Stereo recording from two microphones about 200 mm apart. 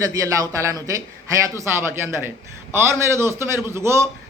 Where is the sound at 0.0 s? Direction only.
15° right (ahead or behind).